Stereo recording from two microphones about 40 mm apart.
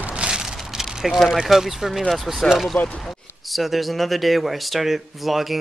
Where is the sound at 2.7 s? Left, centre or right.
Left.